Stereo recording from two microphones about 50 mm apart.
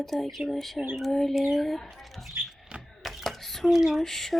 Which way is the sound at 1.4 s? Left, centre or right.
Centre.